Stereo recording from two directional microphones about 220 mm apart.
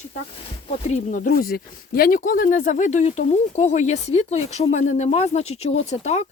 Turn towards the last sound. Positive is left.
turn(degrees=30)  # may be behind; listen again after turning